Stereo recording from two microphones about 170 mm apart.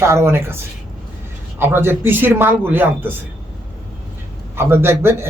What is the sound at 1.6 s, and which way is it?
Speech, 15° right (ahead or behind).